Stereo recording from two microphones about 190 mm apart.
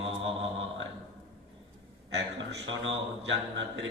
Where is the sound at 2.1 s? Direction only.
75° right (ahead or behind).